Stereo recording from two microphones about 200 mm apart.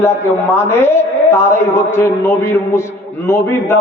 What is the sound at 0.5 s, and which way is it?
A man's voice, 10° left (ahead or behind).